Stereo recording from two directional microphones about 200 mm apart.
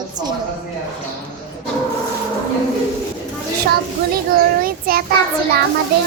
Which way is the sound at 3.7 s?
50° right (ahead or behind).